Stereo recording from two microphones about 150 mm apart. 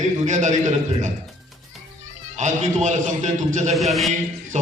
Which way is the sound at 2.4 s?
50° right (ahead or behind).